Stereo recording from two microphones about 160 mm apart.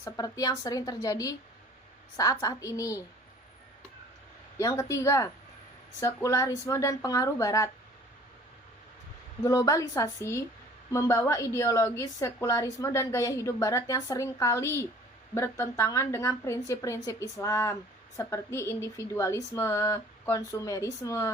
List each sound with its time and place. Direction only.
0.0 s a woman's voice: 25° left (ahead or behind)
4.6 s a woman's voice: 20° left (ahead or behind)
9.4 s a woman's voice: 20° left (ahead or behind)